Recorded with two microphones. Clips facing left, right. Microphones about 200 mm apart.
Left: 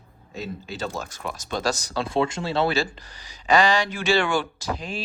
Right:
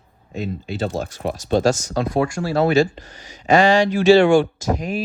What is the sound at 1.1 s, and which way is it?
Speech, 40° right (ahead or behind).